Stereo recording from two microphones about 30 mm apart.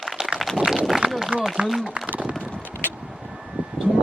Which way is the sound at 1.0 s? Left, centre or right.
Centre.